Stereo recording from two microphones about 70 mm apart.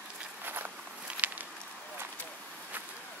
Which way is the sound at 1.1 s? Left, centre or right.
Centre.